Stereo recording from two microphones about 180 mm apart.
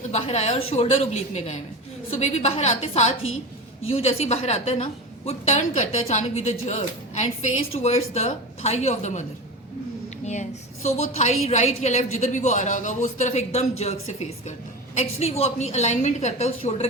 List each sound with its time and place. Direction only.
0.1 s a woman's voice: 35° left (ahead or behind)
10.8 s a woman's voice: 40° left (ahead or behind)